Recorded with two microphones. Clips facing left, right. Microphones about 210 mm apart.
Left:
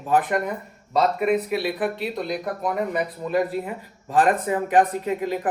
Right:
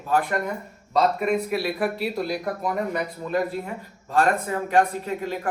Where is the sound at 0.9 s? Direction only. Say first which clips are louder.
Left 1 dB; centre (ahead or behind).